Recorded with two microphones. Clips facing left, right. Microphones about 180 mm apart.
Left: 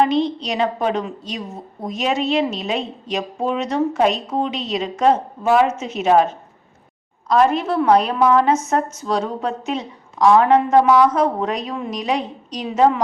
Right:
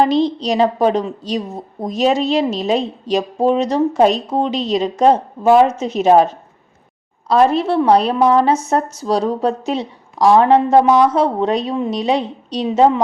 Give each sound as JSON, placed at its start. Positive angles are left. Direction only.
{"t": 0.0, "sound": "a woman's voice", "side_deg": -35}